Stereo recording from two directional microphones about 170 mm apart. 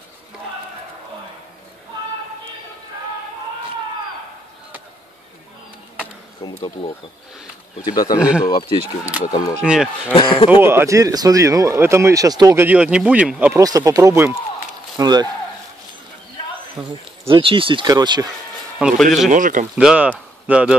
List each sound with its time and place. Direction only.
6.4 s speech: 25° left (ahead or behind)
7.8 s speech: 25° left (ahead or behind)
8.2 s speech: 5° right (ahead or behind)
8.5 s speech: 25° left (ahead or behind)
10.5 s speech: 15° right (ahead or behind)
12.6 s speech: 5° right (ahead or behind)
13.6 s speech: 20° right (ahead or behind)
17.3 s speech: 30° right (ahead or behind)
18.8 s a man's voice: 5° right (ahead or behind)
19.3 s a man's voice: 50° right (ahead or behind)
19.7 s speech: 5° right (ahead or behind)